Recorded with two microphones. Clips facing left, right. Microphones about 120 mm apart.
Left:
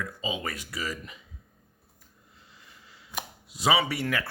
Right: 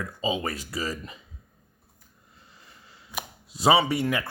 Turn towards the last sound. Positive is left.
turn(degrees=-20)  # may be behind; listen again after turning